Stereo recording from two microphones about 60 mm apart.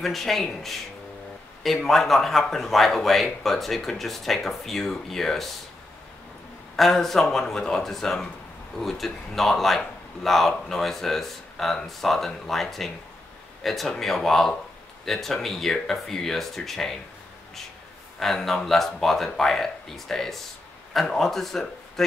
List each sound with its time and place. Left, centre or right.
0.0 s a man's voice: centre
6.8 s a man's voice: centre
18.2 s a man's voice: centre